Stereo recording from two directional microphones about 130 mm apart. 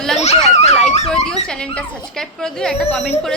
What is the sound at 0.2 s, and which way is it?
Speech, 60° left (ahead or behind).